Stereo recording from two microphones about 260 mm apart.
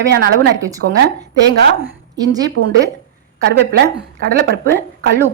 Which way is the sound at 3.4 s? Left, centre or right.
Right.